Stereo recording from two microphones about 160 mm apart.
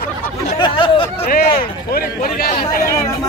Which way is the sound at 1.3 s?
65° left (ahead or behind).